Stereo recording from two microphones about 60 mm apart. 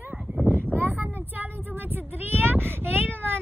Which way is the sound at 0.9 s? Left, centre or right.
Right.